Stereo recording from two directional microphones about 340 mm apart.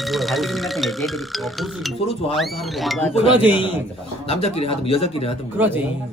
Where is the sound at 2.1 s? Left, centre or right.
Centre.